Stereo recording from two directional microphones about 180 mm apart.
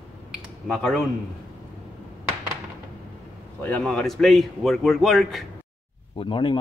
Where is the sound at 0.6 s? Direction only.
Centre (ahead or behind).